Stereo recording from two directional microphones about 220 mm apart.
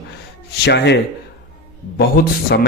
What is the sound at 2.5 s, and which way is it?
Speech, 55° left (ahead or behind).